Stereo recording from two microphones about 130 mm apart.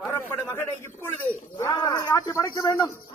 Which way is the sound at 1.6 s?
30° left (ahead or behind).